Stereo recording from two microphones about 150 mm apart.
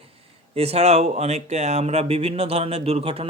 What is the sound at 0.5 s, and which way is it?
Speech, 40° right (ahead or behind).